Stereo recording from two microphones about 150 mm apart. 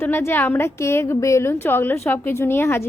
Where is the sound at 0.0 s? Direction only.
15° left (ahead or behind).